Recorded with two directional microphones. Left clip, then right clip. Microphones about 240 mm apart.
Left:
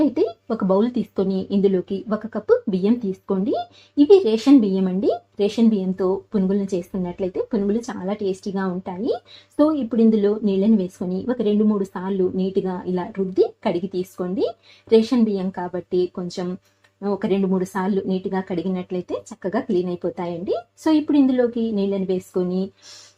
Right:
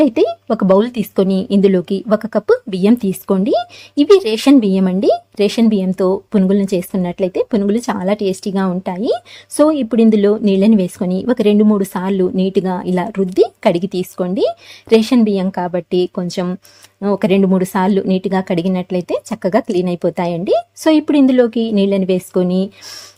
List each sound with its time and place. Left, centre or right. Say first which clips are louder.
0.0 s speech: right 7 dB; right